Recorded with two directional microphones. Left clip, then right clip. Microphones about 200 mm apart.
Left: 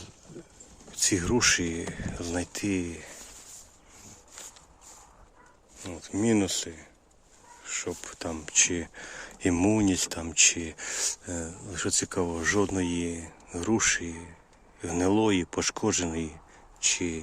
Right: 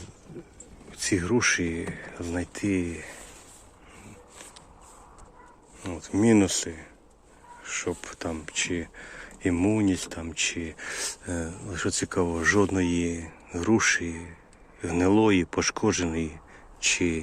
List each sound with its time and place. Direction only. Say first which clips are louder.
0.9 s speech: even; 20° left (ahead or behind)
5.8 s speech: right 5 dB; 5° left (ahead or behind)
8.5 s speech: left 6 dB; 30° left (ahead or behind)
16.8 s speech: right 3 dB; 5° left (ahead or behind)